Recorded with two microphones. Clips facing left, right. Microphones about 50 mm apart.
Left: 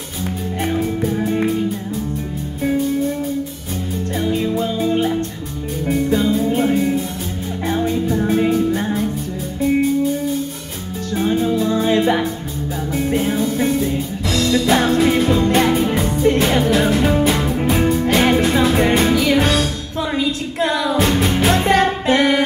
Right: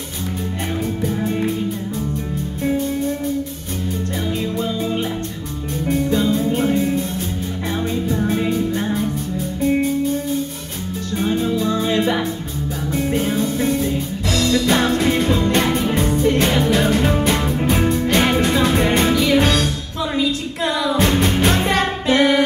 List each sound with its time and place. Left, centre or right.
0.7 s music: centre
4.3 s music: centre
6.1 s music: centre
11.6 s music: centre
12.9 s music: centre
20.2 s a sound: left
20.9 s music: centre
22.0 s music: left